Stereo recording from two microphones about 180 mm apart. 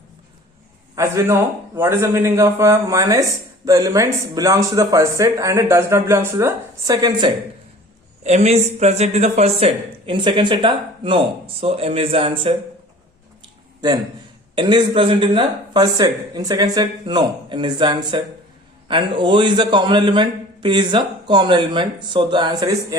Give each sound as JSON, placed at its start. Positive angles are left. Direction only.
{"t": 0.9, "sound": "speech", "side_deg": -15}
{"t": 8.2, "sound": "speech", "side_deg": -35}
{"t": 14.5, "sound": "a man's voice", "side_deg": -25}